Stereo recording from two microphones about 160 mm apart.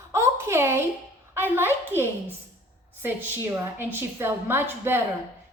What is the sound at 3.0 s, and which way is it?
A woman's voice, 15° right (ahead or behind).